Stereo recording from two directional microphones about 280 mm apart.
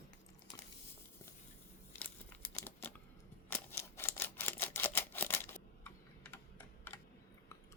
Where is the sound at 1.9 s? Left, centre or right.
Centre.